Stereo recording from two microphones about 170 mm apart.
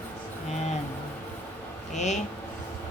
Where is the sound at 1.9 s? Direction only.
45° left (ahead or behind).